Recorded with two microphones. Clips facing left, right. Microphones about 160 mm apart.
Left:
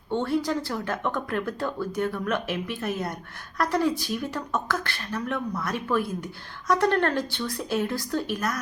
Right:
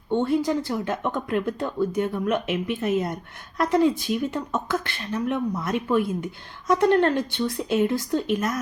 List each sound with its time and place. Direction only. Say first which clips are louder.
0.1 s speech: right 3 dB; 20° right (ahead or behind)